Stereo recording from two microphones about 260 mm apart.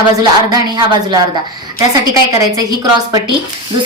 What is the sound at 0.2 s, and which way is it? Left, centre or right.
Speech, centre.